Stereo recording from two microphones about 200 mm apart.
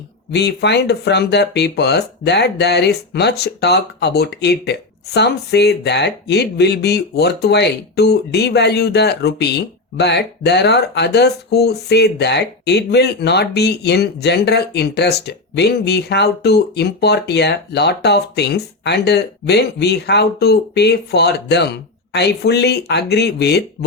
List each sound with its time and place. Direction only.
0.3 s speech: 55° left (ahead or behind)